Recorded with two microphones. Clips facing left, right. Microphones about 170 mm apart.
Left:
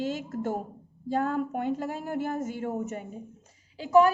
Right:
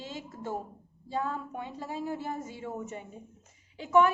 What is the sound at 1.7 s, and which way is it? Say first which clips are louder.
A woman's voice: left 4 dB; 50° left (ahead or behind).